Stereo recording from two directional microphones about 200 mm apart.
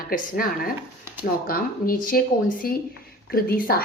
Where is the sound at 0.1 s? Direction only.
45° left (ahead or behind).